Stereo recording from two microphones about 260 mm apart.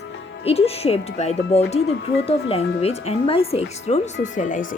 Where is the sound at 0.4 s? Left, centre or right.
Left.